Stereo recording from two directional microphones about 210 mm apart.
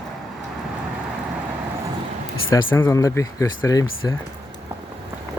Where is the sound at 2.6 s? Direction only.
20° left (ahead or behind).